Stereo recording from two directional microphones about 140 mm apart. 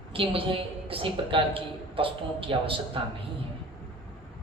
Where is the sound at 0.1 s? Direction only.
40° right (ahead or behind).